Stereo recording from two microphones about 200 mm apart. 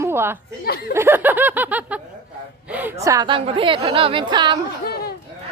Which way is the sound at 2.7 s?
10° right (ahead or behind).